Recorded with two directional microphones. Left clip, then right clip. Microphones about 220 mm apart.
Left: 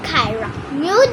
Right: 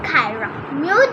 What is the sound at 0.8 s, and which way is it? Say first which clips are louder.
Speech: left 1 dB; 25° left (ahead or behind).